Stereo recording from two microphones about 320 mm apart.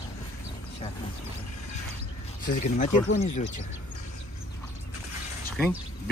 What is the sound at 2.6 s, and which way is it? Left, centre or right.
Speech, left.